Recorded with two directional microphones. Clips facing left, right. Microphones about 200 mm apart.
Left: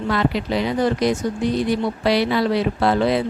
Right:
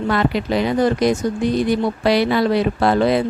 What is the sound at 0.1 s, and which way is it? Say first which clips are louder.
Speech: right 1 dB; 50° right (ahead or behind).